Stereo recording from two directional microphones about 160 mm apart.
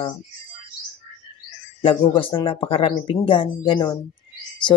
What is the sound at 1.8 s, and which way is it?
Speech, 30° left (ahead or behind).